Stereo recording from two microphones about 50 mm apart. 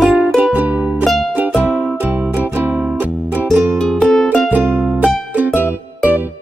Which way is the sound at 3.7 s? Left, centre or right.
Centre.